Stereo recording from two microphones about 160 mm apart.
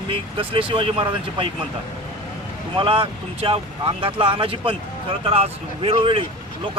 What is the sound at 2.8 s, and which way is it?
Speech, 35° right (ahead or behind).